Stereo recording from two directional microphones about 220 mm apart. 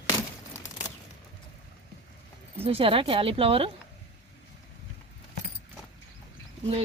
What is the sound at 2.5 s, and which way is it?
Speech, 25° right (ahead or behind).